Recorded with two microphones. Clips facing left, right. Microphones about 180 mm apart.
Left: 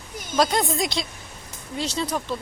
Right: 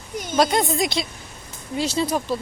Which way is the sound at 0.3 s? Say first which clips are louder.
Right 2 dB; centre (ahead or behind).